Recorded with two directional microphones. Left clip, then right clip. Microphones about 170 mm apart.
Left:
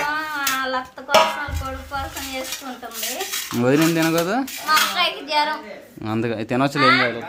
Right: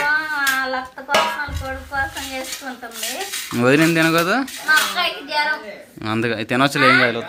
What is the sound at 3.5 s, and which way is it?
Speech, centre (ahead or behind).